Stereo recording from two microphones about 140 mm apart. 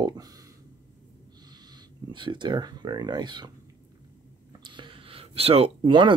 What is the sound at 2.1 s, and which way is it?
Speech, 35° right (ahead or behind).